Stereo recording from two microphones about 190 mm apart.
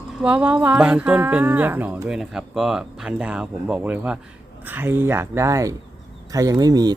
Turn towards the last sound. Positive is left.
turn(degrees=-20)  # may be behind; listen again after turning